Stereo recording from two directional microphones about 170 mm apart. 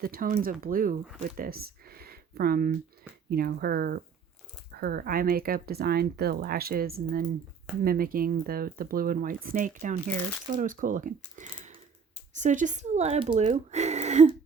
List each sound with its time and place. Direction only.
0.0 s speech: 55° right (ahead or behind); by 14.3 s 40° right (ahead or behind)